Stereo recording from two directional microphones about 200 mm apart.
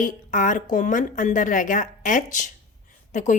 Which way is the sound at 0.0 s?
40° left (ahead or behind).